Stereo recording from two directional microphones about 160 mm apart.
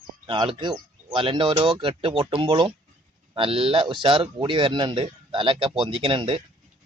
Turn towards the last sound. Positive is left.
turn(degrees=-35)  # may be behind; listen again after turning